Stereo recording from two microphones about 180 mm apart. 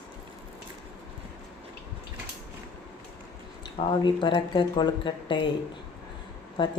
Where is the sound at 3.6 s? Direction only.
25° left (ahead or behind).